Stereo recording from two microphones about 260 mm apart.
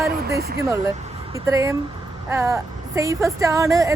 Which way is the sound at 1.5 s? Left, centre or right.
Centre.